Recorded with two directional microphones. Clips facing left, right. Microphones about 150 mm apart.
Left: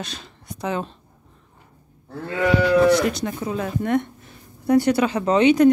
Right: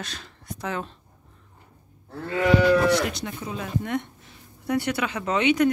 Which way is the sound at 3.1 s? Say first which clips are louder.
Left 7 dB; 50° left (ahead or behind).